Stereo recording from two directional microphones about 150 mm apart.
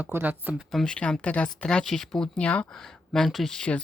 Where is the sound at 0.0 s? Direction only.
10° right (ahead or behind).